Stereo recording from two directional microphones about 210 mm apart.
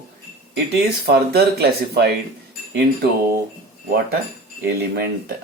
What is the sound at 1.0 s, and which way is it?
Speech, 50° right (ahead or behind).